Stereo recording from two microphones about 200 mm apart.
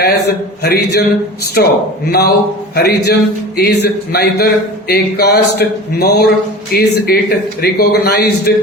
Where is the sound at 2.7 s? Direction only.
55° left (ahead or behind).